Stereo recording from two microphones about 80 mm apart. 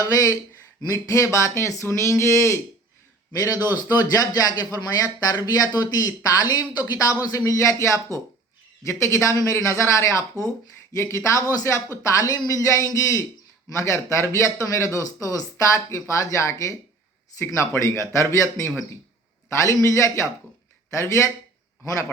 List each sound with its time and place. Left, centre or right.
0.0 s a man's voice: left
3.3 s a man's voice: left